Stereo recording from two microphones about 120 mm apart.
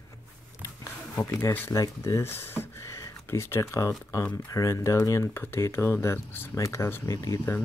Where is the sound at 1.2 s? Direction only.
20° left (ahead or behind).